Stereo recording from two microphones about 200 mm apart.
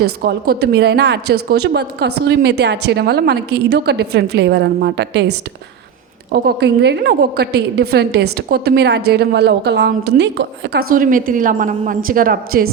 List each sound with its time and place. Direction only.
0.0 s a woman's voice: 55° right (ahead or behind)
6.3 s a woman's voice: 55° right (ahead or behind)